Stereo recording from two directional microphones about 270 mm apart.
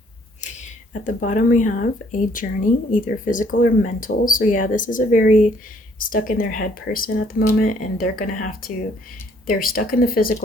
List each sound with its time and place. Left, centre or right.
1.0 s speech: left